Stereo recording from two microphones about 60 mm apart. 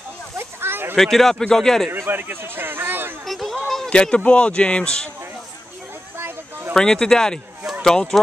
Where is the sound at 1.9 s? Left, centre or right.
Right.